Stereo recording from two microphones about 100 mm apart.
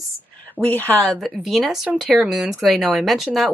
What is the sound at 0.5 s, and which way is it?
Speech, 15° left (ahead or behind).